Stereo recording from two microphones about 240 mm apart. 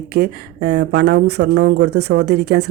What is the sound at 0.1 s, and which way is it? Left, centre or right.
Speech, right.